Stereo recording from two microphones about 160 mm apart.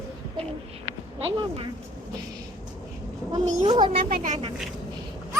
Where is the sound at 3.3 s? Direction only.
25° right (ahead or behind).